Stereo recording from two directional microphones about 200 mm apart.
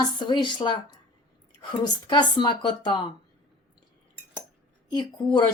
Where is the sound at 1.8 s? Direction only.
20° left (ahead or behind).